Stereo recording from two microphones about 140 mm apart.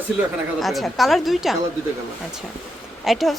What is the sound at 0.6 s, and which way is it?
Speech, centre (ahead or behind).